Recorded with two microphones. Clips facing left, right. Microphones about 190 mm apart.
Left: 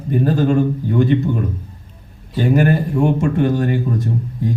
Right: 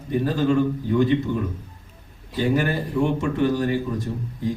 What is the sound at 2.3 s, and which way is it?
A man's voice, 50° left (ahead or behind).